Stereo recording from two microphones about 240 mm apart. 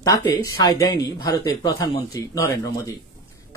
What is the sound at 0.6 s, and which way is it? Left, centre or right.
Speech, centre.